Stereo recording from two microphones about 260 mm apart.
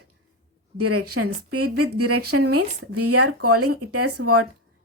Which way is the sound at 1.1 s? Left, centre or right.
Right.